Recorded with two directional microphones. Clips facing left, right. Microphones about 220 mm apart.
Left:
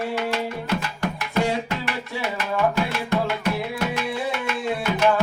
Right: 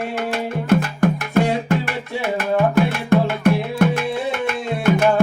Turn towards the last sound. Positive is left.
turn(degrees=-50)  # may be behind; listen again after turning